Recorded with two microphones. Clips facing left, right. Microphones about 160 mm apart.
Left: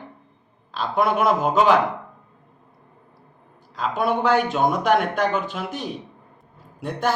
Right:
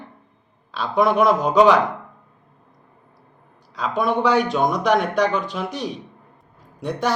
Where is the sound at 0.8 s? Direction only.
Centre (ahead or behind).